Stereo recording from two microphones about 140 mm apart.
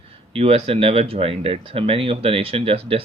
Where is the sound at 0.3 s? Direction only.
45° right (ahead or behind).